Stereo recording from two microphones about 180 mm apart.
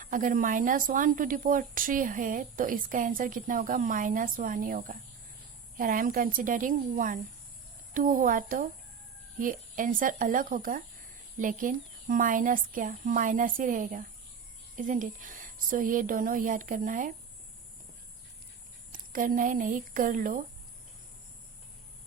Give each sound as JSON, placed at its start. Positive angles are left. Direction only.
{"t": 0.0, "sound": "speech", "side_deg": -45}
{"t": 18.9, "sound": "speech", "side_deg": -50}